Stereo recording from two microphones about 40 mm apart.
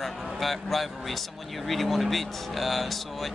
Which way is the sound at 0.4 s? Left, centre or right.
Centre.